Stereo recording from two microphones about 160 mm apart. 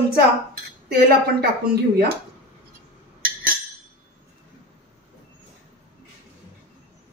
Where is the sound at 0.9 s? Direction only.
75° right (ahead or behind).